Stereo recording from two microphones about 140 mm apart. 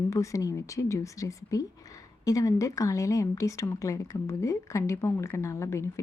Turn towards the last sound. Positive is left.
turn(degrees=20)  # may be behind; listen again after turning